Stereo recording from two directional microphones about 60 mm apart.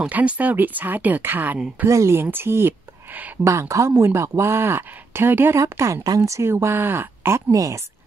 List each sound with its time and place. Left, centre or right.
0.1 s speech: right
1.9 s speech: right
2.2 s speech: right
3.1 s speech: right
3.4 s speech: right
5.6 s speech: right
7.5 s a woman's voice: right